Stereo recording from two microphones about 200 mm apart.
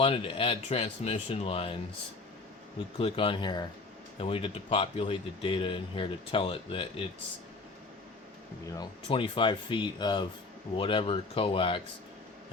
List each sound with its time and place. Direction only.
0.0 s speech: 25° left (ahead or behind)
3.0 s speech: 25° left (ahead or behind)
8.7 s speech: 20° left (ahead or behind)